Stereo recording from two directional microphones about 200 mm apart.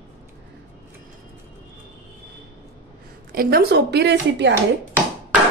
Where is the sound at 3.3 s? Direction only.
50° right (ahead or behind).